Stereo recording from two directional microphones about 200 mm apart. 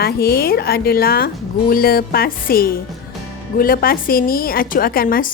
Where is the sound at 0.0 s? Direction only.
50° left (ahead or behind).